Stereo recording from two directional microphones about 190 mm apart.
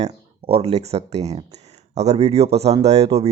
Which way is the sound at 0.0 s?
35° right (ahead or behind).